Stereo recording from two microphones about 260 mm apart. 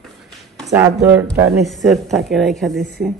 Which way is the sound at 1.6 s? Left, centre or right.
Centre.